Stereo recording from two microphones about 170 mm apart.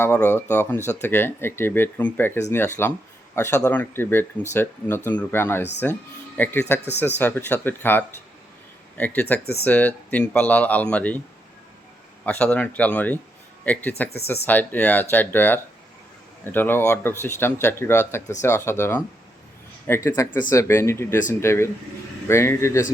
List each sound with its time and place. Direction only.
0.0 s speech: 15° left (ahead or behind)
12.2 s speech: 10° left (ahead or behind)
20.1 s speech: 15° left (ahead or behind)